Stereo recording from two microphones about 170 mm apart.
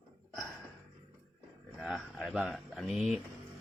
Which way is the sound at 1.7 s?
Centre (ahead or behind).